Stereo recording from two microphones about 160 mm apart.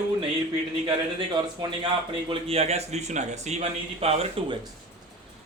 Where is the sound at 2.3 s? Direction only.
40° right (ahead or behind).